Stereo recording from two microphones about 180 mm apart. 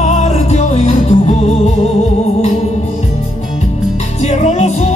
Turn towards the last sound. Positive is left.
turn(degrees=35)  # may be behind; listen again after turning